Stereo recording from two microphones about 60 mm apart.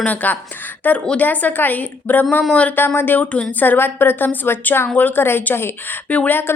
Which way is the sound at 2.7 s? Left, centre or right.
Left.